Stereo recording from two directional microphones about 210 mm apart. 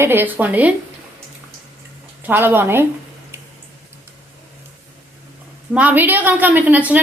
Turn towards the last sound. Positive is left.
turn(degrees=-5)  # may be behind; listen again after turning